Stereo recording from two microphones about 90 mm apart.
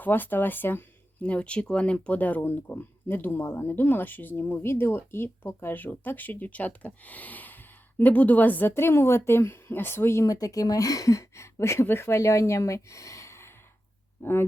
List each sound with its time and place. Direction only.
0.0 s speech: 20° left (ahead or behind)
10.3 s speech: 40° left (ahead or behind)